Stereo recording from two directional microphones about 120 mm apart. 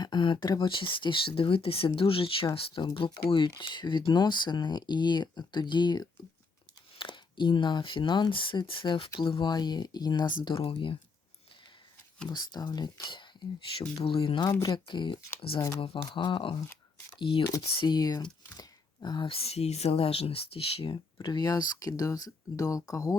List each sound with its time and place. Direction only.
0.0 s speech: 40° left (ahead or behind)
10.6 s speech: 45° left (ahead or behind)
12.3 s speech: 35° left (ahead or behind)
13.7 s speech: 50° left (ahead or behind); by 18.3 s 35° left (ahead or behind)
18.5 s a sound: 35° left (ahead or behind)
19.3 s speech: 55° left (ahead or behind); by 23.1 s 30° left (ahead or behind)